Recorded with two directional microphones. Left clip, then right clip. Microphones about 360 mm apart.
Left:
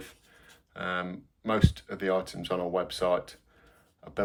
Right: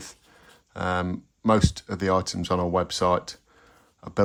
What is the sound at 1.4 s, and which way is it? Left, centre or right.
Speech, centre.